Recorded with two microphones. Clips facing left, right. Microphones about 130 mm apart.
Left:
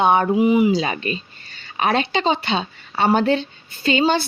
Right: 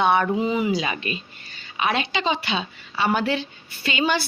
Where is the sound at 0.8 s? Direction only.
35° left (ahead or behind).